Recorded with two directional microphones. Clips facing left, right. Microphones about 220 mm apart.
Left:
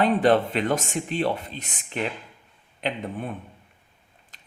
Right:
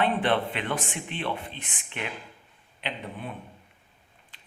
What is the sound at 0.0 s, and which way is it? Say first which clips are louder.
A man's voice: left 6 dB; 40° left (ahead or behind).